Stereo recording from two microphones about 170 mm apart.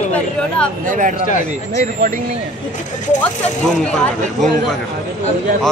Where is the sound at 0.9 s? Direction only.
50° right (ahead or behind).